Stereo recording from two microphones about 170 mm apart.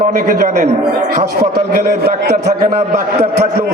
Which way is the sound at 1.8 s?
65° right (ahead or behind).